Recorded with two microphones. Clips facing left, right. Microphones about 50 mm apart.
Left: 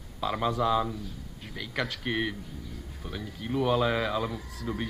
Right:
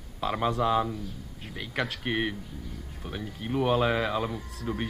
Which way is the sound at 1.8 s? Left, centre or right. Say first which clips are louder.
Right 1 dB; centre.